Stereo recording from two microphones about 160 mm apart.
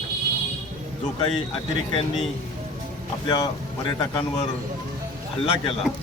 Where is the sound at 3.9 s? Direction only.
30° left (ahead or behind).